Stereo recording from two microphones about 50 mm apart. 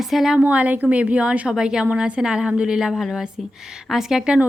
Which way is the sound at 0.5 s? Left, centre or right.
Right.